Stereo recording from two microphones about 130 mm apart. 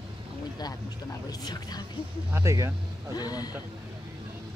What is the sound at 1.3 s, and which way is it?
Speech, 30° left (ahead or behind).